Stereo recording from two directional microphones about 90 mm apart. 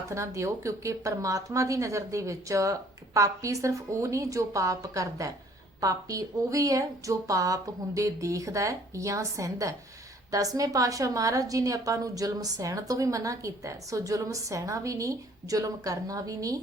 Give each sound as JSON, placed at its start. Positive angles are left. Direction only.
{"t": 0.1, "sound": "a woman's voice", "side_deg": -35}